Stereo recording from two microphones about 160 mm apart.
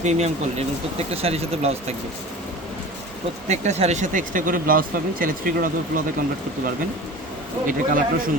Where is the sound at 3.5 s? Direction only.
45° right (ahead or behind).